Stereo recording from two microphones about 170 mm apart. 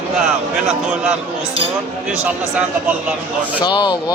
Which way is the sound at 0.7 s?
5° right (ahead or behind).